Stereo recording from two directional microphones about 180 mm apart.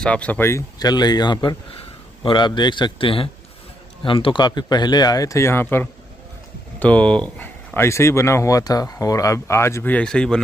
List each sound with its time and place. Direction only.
0.0 s speech: 5° left (ahead or behind)